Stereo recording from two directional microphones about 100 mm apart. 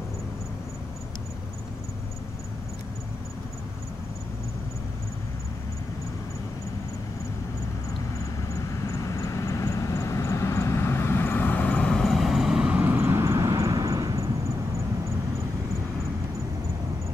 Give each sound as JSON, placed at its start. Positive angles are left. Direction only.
{"t": 8.5, "sound": "vehicle", "side_deg": 35}